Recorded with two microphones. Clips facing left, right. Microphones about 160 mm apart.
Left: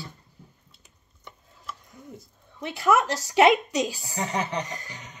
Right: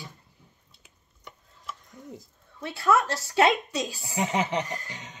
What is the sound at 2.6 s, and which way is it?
Speech, 15° left (ahead or behind).